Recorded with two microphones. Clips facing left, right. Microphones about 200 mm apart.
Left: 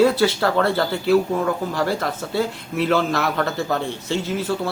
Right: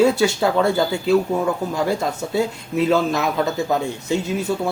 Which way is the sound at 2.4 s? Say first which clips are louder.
Right 2 dB; 15° right (ahead or behind).